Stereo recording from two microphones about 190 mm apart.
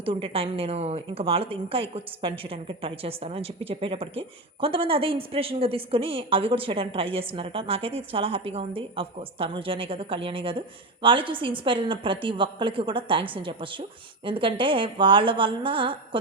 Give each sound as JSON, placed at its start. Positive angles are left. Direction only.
{"t": 0.0, "sound": "a woman's voice", "side_deg": -30}